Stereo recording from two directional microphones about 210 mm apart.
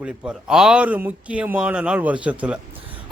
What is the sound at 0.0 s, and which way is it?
A man's voice, 5° right (ahead or behind).